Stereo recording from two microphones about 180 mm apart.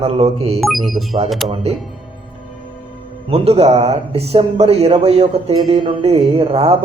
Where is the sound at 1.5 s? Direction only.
35° right (ahead or behind).